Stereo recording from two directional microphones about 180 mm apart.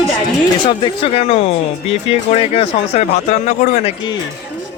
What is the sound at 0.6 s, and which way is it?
Speech, 30° left (ahead or behind).